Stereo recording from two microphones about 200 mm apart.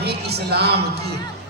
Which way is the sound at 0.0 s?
55° right (ahead or behind).